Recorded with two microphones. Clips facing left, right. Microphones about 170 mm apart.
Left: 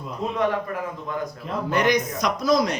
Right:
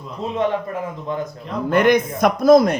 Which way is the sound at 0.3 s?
25° right (ahead or behind).